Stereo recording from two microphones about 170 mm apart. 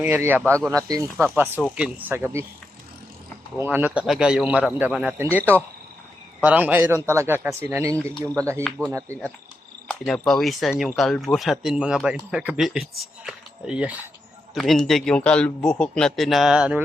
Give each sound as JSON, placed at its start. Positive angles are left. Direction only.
{"t": 0.0, "sound": "a man's voice", "side_deg": -10}
{"t": 3.6, "sound": "a man's voice", "side_deg": -10}
{"t": 9.9, "sound": "speech", "side_deg": 5}